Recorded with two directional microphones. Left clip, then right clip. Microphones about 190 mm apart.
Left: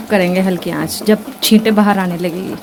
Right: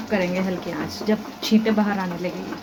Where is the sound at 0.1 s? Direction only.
65° left (ahead or behind).